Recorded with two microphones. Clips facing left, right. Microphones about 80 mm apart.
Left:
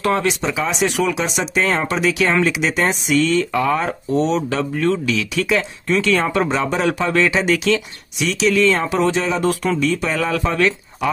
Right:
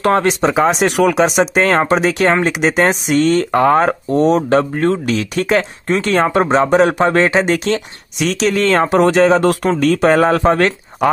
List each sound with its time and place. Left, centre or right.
0.0 s speech: right